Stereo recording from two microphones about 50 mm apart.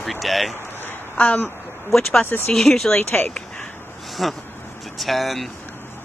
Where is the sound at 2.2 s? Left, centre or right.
Left.